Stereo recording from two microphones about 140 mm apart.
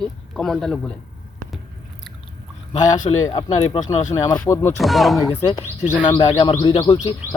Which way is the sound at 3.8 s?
60° left (ahead or behind).